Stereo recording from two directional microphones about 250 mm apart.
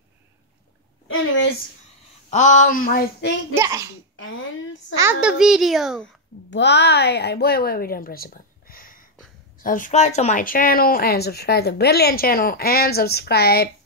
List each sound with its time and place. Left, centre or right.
1.0 s a sound: left
2.3 s speech: left
3.5 s a child's voice: centre
4.2 s speech: left
4.9 s a child's voice: centre
6.5 s speech: left